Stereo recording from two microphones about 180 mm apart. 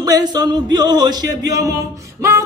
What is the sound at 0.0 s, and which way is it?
Speech, 20° right (ahead or behind).